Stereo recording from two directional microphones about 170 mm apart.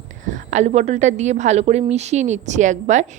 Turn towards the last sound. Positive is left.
turn(degrees=-45)  # may be behind; listen again after turning